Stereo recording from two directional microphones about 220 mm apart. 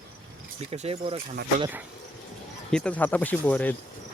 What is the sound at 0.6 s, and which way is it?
Speech, 30° right (ahead or behind).